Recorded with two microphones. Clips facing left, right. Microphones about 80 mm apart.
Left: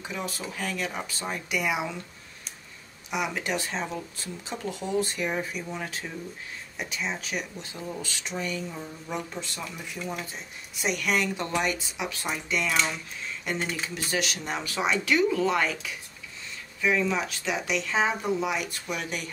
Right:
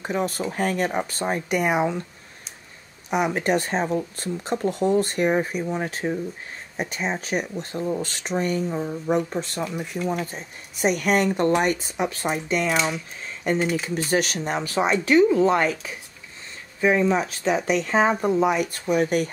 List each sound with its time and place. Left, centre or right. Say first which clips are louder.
0.0 s speech: right 9 dB; right
3.1 s speech: right 8 dB; right
12.7 s speech: right 4 dB; centre
14.1 s speech: right 7 dB; right